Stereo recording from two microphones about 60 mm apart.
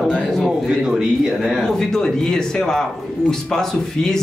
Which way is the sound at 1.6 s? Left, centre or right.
Centre.